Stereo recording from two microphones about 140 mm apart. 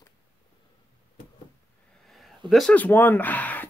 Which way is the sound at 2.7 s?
15° left (ahead or behind).